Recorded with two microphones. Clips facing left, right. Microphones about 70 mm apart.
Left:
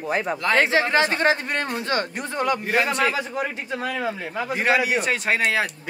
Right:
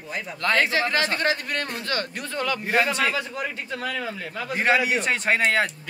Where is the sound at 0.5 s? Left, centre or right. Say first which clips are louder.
Left 3 dB; left.